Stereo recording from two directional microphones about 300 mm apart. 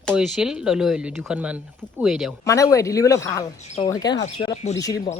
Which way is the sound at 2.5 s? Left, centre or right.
Centre.